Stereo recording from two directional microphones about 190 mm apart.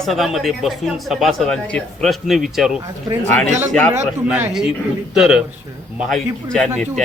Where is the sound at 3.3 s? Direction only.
40° right (ahead or behind).